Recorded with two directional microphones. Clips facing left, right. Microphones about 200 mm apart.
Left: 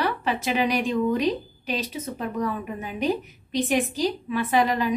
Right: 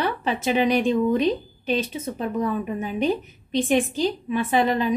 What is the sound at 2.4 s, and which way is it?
A woman's voice, 25° right (ahead or behind).